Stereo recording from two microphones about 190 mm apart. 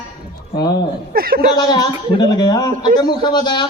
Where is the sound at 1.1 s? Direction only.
50° right (ahead or behind).